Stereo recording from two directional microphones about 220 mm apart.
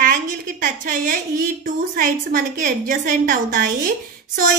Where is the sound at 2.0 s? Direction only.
35° right (ahead or behind).